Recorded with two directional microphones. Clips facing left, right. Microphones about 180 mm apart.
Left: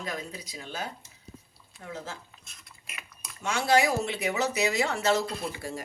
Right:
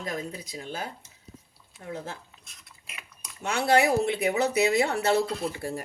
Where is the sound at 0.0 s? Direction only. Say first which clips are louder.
Right 3 dB; 45° right (ahead or behind).